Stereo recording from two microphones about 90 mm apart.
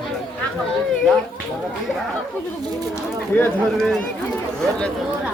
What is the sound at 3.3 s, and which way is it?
Speech, 20° left (ahead or behind).